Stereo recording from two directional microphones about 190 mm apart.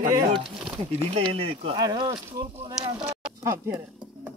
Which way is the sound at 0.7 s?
30° right (ahead or behind).